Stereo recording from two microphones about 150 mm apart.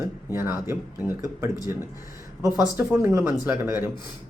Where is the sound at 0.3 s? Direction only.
15° right (ahead or behind).